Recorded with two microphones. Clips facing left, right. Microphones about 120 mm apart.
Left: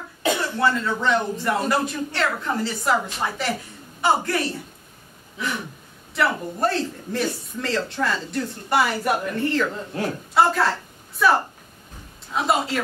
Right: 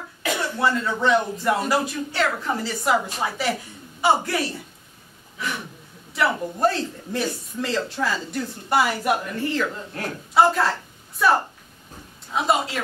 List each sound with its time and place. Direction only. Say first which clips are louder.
0.2 s cough: left 4 dB; 25° left (ahead or behind)
0.6 s speech: even; centre (ahead or behind)
6.1 s a man's voice: even; centre (ahead or behind)